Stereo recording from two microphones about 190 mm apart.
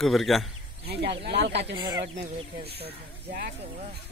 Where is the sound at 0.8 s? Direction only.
60° right (ahead or behind).